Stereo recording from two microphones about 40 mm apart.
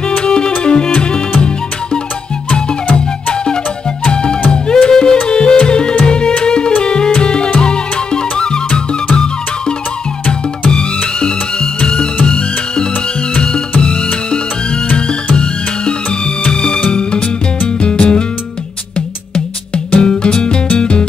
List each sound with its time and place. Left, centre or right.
0.1 s music: left
4.0 s music: left
15.3 s music: left